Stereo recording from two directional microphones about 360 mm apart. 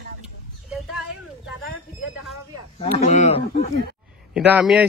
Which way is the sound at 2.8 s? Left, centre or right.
Centre.